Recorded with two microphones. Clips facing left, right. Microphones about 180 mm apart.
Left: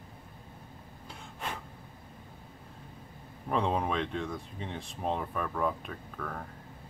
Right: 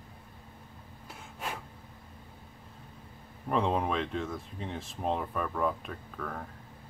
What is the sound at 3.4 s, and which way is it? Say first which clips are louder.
Speech: right 1 dB; centre (ahead or behind).